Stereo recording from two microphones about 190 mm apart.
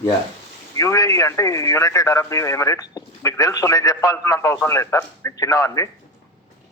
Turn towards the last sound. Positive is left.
turn(degrees=15)  # may be behind; listen again after turning